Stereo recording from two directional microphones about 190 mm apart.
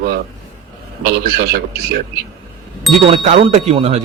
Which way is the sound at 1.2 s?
55° right (ahead or behind).